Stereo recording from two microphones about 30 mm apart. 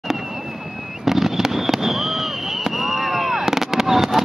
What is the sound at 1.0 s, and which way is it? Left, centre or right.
Fireworks, centre.